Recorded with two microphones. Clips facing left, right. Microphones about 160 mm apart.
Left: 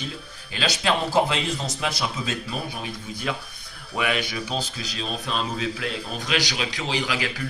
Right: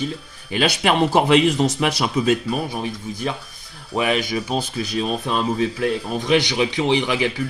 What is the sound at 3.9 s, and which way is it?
Speech, 40° right (ahead or behind).